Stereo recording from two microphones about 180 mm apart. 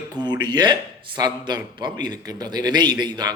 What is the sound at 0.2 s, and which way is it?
A man's voice, 25° right (ahead or behind).